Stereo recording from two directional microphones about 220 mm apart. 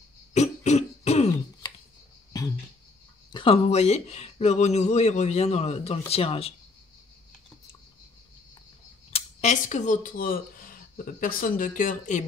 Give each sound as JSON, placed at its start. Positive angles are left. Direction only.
{"t": 0.3, "sound": "throat clearing", "side_deg": 30}
{"t": 2.3, "sound": "a sound", "side_deg": 15}
{"t": 3.3, "sound": "speech", "side_deg": 20}
{"t": 9.1, "sound": "speech", "side_deg": 30}